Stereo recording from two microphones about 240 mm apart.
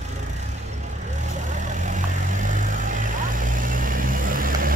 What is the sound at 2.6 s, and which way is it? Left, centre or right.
Vehicle, right.